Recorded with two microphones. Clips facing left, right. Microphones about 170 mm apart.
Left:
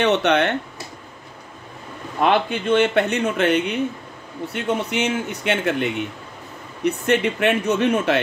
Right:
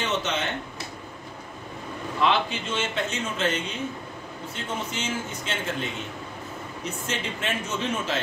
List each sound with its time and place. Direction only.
0.0 s speech: 65° left (ahead or behind)
2.1 s a man's voice: 55° left (ahead or behind)